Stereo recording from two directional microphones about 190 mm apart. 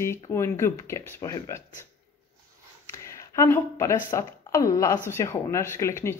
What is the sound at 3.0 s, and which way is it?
Speech, 15° left (ahead or behind).